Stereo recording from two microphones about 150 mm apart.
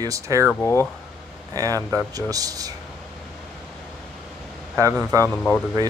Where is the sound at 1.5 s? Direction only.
25° right (ahead or behind).